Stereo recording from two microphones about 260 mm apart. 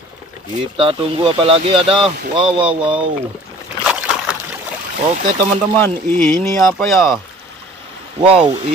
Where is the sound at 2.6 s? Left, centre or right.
Centre.